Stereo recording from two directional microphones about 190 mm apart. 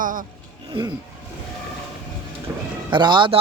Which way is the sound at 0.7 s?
20° right (ahead or behind).